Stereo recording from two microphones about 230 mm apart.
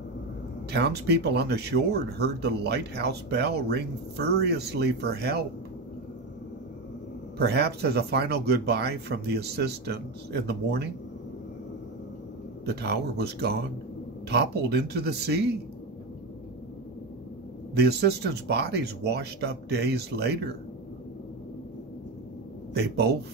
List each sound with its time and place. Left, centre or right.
0.7 s speech: right
7.3 s speech: right
12.6 s speech: right
17.7 s speech: right
22.8 s speech: right